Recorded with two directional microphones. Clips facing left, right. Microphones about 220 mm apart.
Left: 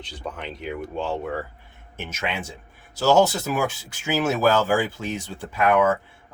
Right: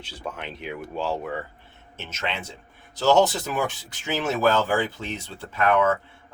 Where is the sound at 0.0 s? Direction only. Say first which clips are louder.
Left 1 dB; centre (ahead or behind).